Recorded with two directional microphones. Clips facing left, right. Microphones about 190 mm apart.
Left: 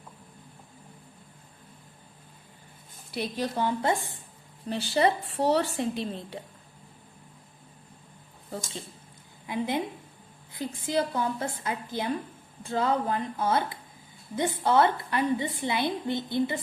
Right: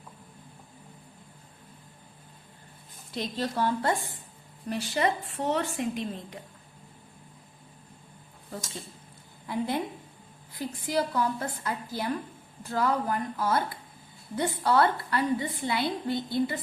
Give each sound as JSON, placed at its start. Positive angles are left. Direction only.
{"t": 3.1, "sound": "a woman's voice", "side_deg": 10}
{"t": 4.7, "sound": "speech", "side_deg": 30}
{"t": 9.5, "sound": "a woman's voice", "side_deg": 15}